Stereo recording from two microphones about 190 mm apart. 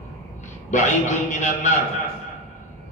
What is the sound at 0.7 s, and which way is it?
A man's voice, 40° left (ahead or behind).